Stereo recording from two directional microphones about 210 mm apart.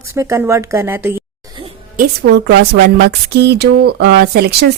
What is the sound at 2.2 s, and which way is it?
Speech, 55° right (ahead or behind).